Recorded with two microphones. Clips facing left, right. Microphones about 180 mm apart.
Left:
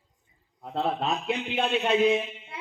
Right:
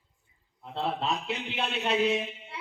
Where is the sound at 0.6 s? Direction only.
45° left (ahead or behind).